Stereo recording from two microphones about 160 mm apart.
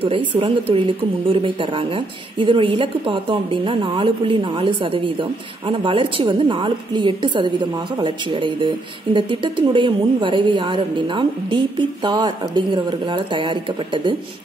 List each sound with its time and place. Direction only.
0.0 s a woman's voice: 35° right (ahead or behind)